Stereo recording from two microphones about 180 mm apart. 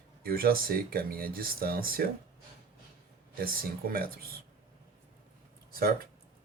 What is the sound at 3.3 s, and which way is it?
Speech, 55° right (ahead or behind).